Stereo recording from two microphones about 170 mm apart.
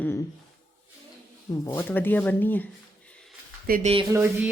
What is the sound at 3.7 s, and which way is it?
Speech, 60° right (ahead or behind).